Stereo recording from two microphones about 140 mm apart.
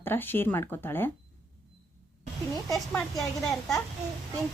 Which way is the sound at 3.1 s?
Centre (ahead or behind).